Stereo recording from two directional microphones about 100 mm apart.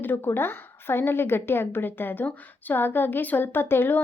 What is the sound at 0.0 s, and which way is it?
A woman's voice, 20° left (ahead or behind).